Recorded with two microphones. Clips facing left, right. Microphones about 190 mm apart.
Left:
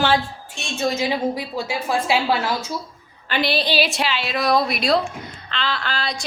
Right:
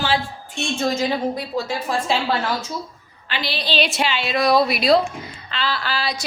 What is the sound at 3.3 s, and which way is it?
Speech, 50° left (ahead or behind).